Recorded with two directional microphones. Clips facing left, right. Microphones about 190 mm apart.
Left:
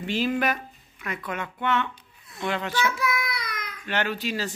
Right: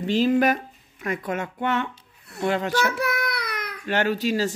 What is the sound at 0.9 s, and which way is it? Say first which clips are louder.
Speech: right 5 dB; 45° right (ahead or behind).